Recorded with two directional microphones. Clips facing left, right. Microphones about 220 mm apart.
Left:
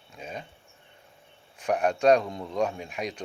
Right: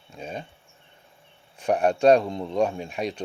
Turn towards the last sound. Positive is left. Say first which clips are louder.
# right 4 dB
turn(degrees=-30)  # may be behind; listen again after turning